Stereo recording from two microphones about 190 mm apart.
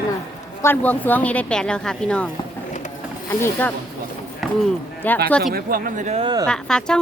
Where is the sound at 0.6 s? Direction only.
10° left (ahead or behind).